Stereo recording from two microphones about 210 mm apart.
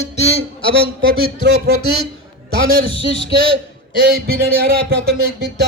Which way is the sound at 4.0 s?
45° right (ahead or behind).